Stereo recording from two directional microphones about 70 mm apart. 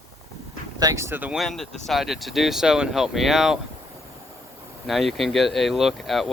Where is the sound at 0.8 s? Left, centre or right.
Right.